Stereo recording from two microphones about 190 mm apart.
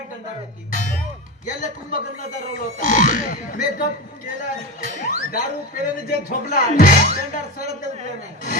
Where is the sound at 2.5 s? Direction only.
45° left (ahead or behind).